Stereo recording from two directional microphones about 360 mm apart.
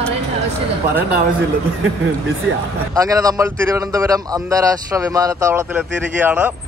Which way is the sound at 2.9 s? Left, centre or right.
Centre.